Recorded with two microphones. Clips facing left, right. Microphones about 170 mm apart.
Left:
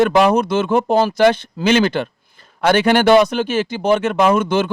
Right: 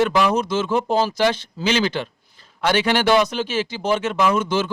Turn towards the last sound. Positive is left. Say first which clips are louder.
# left 4 dB
turn(degrees=55)  # may be behind; listen again after turning